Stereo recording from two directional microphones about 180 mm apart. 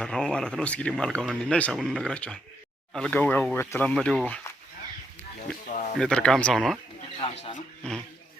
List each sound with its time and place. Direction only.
0.0 s speech: 5° left (ahead or behind)
5.6 s a sound: 45° left (ahead or behind)
6.0 s speech: 5° left (ahead or behind)